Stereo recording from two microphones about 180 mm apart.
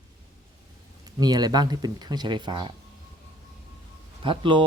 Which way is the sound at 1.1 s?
20° right (ahead or behind).